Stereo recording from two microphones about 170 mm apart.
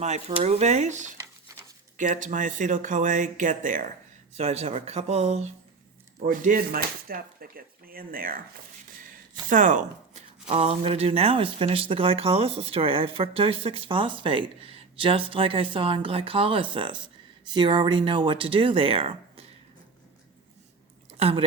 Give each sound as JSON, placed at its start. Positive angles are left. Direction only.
{"t": 0.0, "sound": "speech", "side_deg": -40}
{"t": 1.5, "sound": "a sound", "side_deg": -15}
{"t": 2.0, "sound": "speech", "side_deg": -50}
{"t": 4.4, "sound": "speech", "side_deg": -40}
{"t": 9.5, "sound": "speech", "side_deg": -50}
{"t": 10.5, "sound": "speech", "side_deg": -35}
{"t": 21.1, "sound": "a sound", "side_deg": -35}